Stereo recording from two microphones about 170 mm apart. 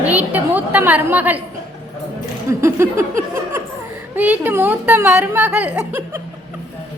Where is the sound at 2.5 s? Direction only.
15° right (ahead or behind).